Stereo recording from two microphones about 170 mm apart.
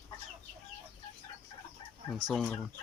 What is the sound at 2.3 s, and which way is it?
Speech, centre (ahead or behind).